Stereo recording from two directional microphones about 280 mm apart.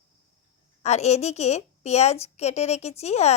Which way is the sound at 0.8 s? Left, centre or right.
Left.